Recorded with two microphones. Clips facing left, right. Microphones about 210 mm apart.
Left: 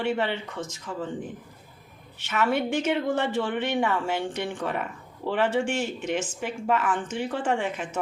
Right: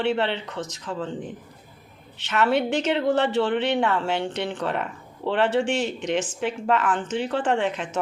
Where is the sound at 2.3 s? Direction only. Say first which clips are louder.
Right 3 dB; 80° right.